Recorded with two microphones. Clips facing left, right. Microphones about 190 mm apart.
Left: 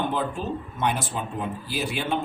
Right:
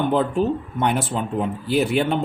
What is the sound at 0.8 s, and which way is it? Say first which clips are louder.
Speech: right 4 dB; 60° right (ahead or behind).